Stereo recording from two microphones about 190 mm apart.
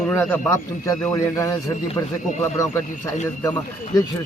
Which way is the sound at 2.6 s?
15° left (ahead or behind).